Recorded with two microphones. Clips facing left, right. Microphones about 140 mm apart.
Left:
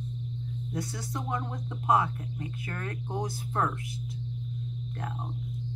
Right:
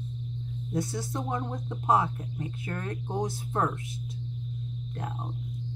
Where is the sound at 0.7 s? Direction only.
25° right (ahead or behind).